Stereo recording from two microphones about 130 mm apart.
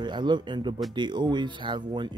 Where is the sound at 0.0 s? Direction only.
35° right (ahead or behind).